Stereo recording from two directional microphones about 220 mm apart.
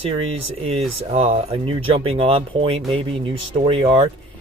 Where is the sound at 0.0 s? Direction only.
25° right (ahead or behind).